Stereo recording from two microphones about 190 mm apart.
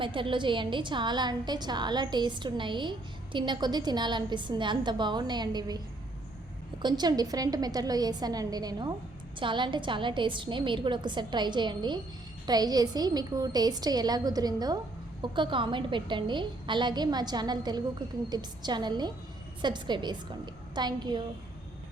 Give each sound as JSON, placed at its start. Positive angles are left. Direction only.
{"t": 0.0, "sound": "a woman's voice", "side_deg": -25}
{"t": 6.8, "sound": "a woman's voice", "side_deg": -20}